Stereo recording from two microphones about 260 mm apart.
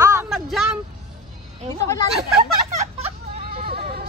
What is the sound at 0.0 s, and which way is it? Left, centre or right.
Vehicle, centre.